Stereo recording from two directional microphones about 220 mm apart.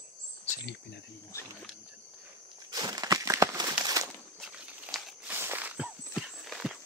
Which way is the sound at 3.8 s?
15° right (ahead or behind).